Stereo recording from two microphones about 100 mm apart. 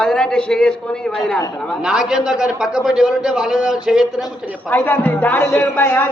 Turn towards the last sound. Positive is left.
turn(degrees=20)  # may be behind; listen again after turning